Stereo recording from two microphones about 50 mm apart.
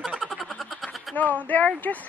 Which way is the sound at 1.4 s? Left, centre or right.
Left.